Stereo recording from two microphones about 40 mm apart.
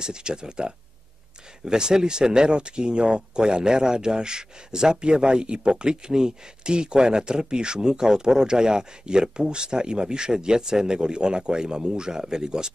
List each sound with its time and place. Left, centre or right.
0.0 s speech: centre